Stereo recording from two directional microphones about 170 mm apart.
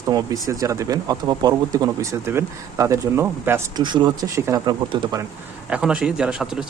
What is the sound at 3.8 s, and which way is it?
Speech, 30° right (ahead or behind).